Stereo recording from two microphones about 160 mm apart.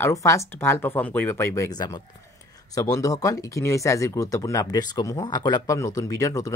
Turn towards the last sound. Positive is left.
turn(degrees=20)  # may be behind; listen again after turning